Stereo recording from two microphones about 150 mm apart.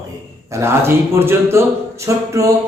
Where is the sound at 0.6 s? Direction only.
15° right (ahead or behind).